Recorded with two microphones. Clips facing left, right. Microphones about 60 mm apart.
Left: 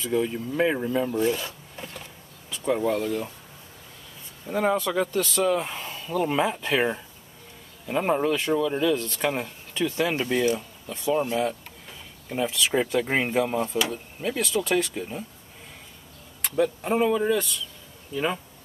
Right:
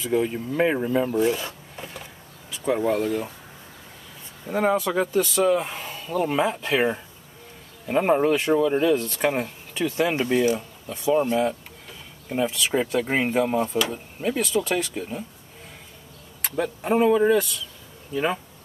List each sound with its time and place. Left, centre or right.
0.1 s speech: centre
1.1 s a sound: centre
2.5 s speech: centre
4.5 s speech: centre
7.8 s speech: centre
11.1 s speech: centre
16.4 s speech: centre